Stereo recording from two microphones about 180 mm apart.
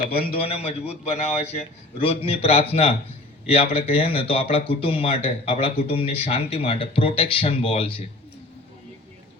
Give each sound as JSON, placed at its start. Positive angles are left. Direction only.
{"t": 0.1, "sound": "a man's voice", "side_deg": 55}
{"t": 0.3, "sound": "speech", "side_deg": 35}